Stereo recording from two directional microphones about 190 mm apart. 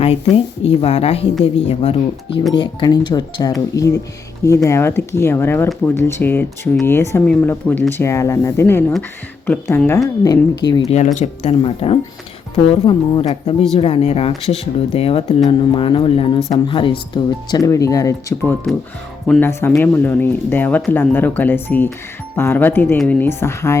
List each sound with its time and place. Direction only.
0.0 s speech: 30° left (ahead or behind)
10.8 s speech: 40° left (ahead or behind); by 23.7 s 15° left (ahead or behind)